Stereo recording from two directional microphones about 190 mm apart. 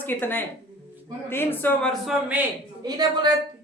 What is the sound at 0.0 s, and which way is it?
Speech, 10° left (ahead or behind).